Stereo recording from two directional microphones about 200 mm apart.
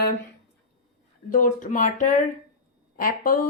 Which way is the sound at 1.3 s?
40° left (ahead or behind).